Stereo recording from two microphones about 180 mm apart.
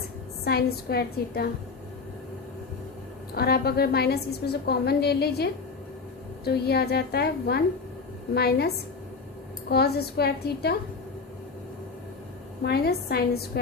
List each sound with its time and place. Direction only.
0.4 s a woman's voice: 60° left (ahead or behind)
3.3 s a woman's voice: 60° left (ahead or behind)
12.6 s a woman's voice: 60° left (ahead or behind)